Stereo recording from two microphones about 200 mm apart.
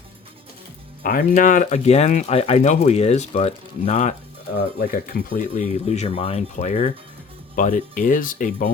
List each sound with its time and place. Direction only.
1.0 s speech: 45° left (ahead or behind)
4.8 s speech: 50° left (ahead or behind)